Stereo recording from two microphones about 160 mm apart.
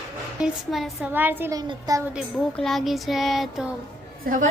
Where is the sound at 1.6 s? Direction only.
25° right (ahead or behind).